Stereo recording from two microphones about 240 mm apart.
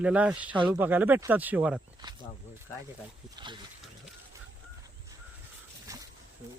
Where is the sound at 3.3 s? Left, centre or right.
Centre.